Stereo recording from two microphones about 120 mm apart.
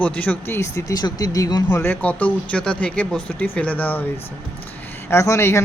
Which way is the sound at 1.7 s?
15° left (ahead or behind).